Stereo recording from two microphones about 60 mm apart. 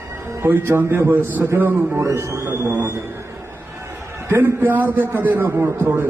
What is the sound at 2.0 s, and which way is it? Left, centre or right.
Speech, right.